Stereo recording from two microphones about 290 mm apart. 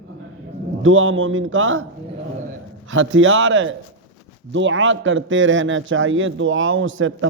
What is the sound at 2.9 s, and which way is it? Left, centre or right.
A man's voice, right.